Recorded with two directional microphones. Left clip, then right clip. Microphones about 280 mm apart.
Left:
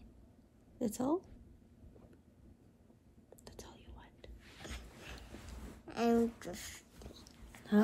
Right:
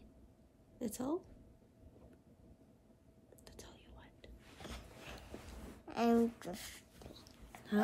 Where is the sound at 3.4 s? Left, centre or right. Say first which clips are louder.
Left 3 dB; centre.